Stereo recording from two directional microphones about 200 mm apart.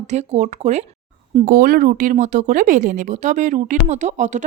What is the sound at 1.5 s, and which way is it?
A woman's voice, 45° right (ahead or behind).